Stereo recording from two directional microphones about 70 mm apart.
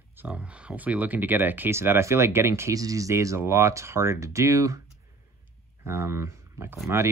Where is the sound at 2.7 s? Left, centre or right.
Right.